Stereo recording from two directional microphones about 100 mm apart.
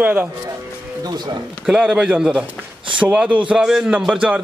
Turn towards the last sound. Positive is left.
turn(degrees=-10)  # may be behind; listen again after turning